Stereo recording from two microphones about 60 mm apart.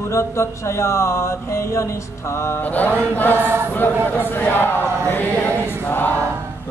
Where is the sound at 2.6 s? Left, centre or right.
Left.